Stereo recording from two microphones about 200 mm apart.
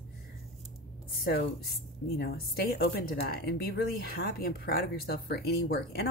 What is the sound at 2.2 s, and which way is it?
A woman's voice, 50° left (ahead or behind).